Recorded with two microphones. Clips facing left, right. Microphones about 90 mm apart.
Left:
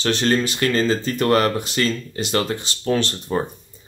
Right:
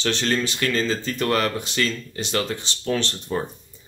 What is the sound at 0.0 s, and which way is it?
Speech, 40° left (ahead or behind).